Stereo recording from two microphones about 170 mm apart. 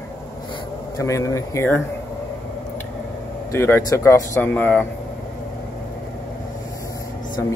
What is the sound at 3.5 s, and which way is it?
Speech, 15° left (ahead or behind).